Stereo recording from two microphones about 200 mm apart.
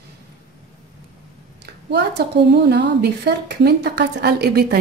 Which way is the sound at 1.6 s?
55° right (ahead or behind).